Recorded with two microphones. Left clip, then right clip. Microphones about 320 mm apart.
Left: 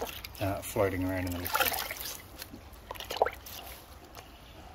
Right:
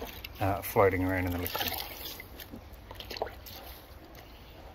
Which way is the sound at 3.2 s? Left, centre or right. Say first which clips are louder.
Left 9 dB; left.